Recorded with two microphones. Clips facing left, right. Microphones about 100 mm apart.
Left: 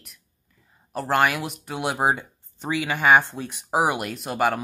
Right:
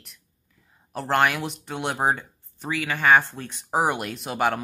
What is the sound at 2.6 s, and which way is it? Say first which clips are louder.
Speech: left 2 dB; 20° left (ahead or behind).